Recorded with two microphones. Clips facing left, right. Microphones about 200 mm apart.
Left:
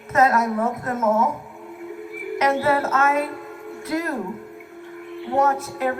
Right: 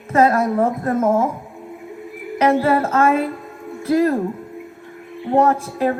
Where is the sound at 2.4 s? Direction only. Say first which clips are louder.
Right 4 dB; 30° right (ahead or behind).